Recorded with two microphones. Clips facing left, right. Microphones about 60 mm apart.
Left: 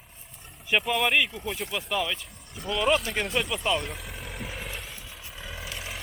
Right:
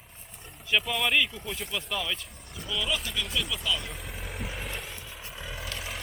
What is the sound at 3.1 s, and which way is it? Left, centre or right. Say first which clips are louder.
Speech: left 4 dB; left.